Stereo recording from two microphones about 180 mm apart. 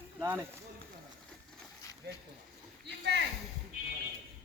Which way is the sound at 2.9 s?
70° right (ahead or behind).